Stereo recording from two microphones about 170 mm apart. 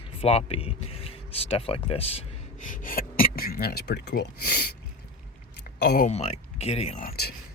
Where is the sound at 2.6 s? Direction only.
55° left (ahead or behind); by 4.6 s 70° left (ahead or behind).